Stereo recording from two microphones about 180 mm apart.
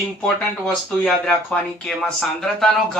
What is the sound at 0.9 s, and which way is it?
Speech, 5° left (ahead or behind).